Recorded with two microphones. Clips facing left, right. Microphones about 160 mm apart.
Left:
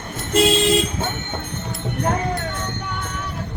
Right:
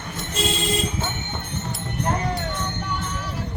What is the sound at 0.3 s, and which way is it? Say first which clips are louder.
Vehicle: left 9 dB; 85° left.